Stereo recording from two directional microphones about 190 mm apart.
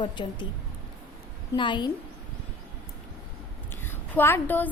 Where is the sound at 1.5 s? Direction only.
25° left (ahead or behind).